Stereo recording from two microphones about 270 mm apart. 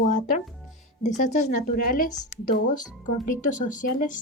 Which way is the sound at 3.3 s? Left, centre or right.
Left.